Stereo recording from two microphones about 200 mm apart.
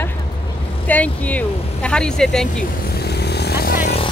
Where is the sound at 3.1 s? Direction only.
55° left (ahead or behind).